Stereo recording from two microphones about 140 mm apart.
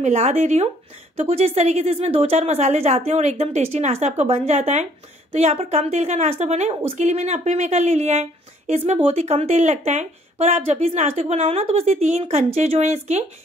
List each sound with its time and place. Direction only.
0.0 s speech: 55° right (ahead or behind)